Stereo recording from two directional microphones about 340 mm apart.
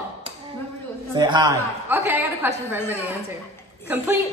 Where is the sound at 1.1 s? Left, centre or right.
Centre.